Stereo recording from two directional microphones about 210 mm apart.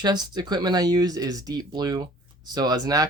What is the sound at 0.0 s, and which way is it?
Speech, 20° right (ahead or behind).